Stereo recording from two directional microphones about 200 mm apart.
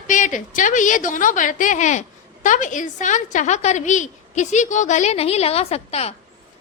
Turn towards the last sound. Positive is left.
turn(degrees=30)  # may be behind; listen again after turning